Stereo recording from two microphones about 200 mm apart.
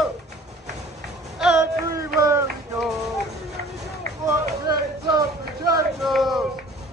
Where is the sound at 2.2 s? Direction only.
15° right (ahead or behind).